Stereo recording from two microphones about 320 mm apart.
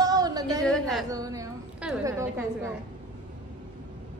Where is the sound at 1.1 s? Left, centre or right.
Centre.